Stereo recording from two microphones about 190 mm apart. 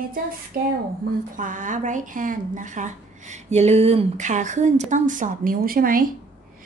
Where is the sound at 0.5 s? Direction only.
55° right (ahead or behind).